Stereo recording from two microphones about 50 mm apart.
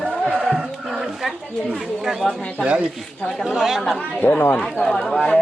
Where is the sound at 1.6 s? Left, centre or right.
Centre.